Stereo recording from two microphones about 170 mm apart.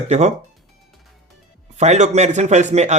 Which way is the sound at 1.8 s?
45° right (ahead or behind).